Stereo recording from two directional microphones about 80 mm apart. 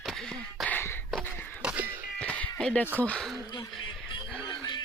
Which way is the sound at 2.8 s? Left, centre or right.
Centre.